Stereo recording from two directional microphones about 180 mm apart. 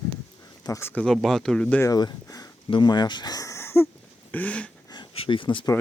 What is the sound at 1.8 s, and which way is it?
Speech, 20° left (ahead or behind).